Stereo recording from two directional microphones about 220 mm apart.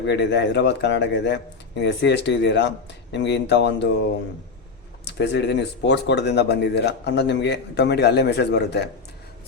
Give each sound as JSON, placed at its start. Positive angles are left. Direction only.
{"t": 0.0, "sound": "speech", "side_deg": 50}
{"t": 5.0, "sound": "speech", "side_deg": 50}